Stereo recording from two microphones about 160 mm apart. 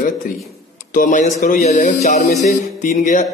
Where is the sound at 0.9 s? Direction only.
55° left (ahead or behind).